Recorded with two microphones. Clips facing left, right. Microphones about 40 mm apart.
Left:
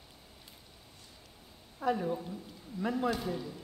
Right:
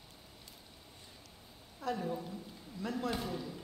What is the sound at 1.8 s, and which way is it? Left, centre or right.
A woman's voice, centre.